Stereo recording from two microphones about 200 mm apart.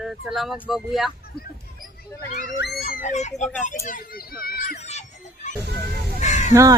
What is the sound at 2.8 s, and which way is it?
Speech, 35° left (ahead or behind).